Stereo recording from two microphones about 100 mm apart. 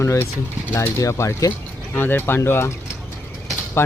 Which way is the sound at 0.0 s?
25° left (ahead or behind).